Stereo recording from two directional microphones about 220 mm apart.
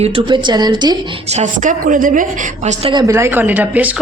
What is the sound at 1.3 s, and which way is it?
A woman's voice, 35° right (ahead or behind).